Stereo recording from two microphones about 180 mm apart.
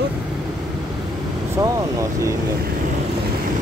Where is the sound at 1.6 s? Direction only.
20° right (ahead or behind).